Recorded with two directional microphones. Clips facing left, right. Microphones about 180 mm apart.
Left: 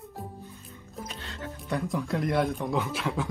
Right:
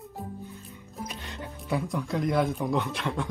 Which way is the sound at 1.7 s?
Centre (ahead or behind).